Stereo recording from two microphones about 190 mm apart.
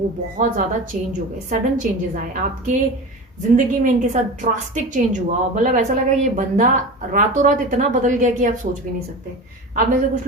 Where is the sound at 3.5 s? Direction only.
40° right (ahead or behind).